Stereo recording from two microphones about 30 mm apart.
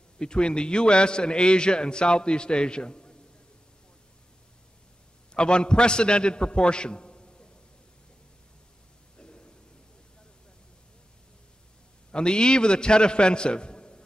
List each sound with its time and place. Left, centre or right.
0.2 s a man's voice: left
5.3 s a man's voice: left
9.2 s a sound: left
12.1 s a man's voice: left